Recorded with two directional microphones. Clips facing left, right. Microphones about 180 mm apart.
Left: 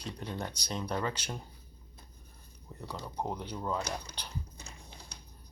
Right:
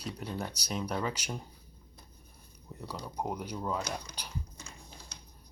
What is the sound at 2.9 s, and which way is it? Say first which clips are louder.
Speech: even; 10° right (ahead or behind).